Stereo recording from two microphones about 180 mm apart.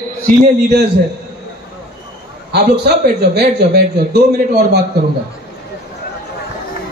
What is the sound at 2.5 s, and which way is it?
A man's voice, 65° right (ahead or behind).